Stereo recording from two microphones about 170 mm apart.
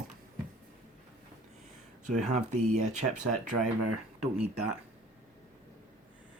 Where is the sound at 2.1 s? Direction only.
45° right (ahead or behind).